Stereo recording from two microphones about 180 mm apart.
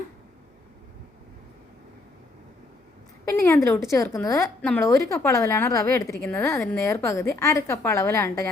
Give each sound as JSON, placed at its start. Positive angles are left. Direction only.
{"t": 3.4, "sound": "a woman's voice", "side_deg": 15}
{"t": 4.6, "sound": "a woman's voice", "side_deg": 5}
{"t": 4.9, "sound": "a woman's voice", "side_deg": 15}